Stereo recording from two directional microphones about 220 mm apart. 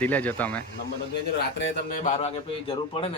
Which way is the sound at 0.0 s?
5° left (ahead or behind).